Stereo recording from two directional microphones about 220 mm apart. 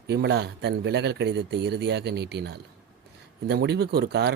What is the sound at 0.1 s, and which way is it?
Speech, 50° right (ahead or behind).